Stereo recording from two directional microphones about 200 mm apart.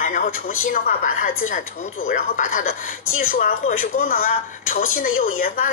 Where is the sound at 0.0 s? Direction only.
40° left (ahead or behind).